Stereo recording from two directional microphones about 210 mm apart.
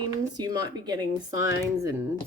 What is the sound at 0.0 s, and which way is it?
Speech, 20° right (ahead or behind).